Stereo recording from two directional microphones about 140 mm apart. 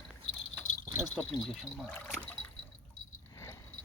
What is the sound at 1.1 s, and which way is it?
Speech, 5° left (ahead or behind).